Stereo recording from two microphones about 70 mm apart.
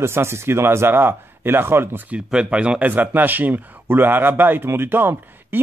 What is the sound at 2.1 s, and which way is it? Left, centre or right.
Speech, centre.